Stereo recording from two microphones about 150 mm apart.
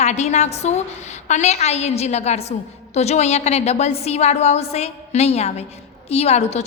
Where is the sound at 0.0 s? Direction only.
50° left (ahead or behind).